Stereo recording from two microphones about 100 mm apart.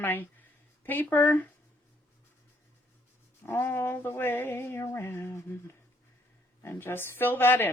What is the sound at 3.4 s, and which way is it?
A woman's voice, 20° left (ahead or behind).